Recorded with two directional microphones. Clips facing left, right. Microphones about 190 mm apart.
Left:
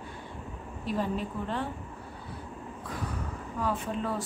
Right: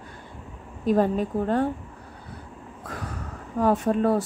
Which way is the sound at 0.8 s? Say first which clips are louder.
Right 10 dB; 50° right (ahead or behind).